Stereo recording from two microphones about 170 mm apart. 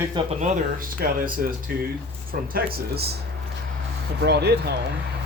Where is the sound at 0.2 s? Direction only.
30° right (ahead or behind).